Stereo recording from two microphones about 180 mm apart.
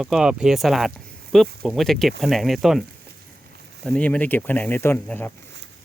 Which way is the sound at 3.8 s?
5° left (ahead or behind).